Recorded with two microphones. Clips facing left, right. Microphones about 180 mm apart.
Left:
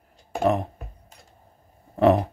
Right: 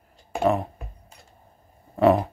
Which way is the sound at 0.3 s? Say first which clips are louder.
Even; 45° left (ahead or behind).